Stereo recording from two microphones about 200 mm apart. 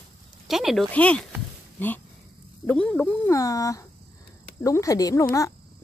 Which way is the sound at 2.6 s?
5° left (ahead or behind).